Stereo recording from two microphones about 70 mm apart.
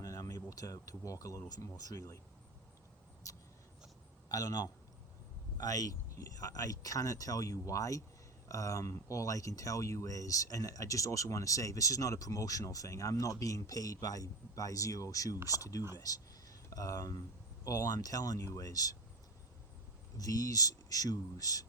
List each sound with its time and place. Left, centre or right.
0.0 s a sound: left
1.6 s speech: left
3.2 s vehicle: left
4.3 s speech: left
20.1 s speech: left